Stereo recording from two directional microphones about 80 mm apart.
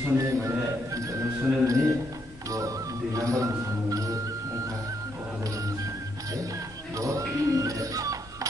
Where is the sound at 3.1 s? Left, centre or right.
Right.